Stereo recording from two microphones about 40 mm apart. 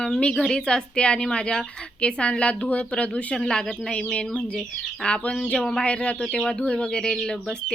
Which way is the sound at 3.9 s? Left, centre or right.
Left.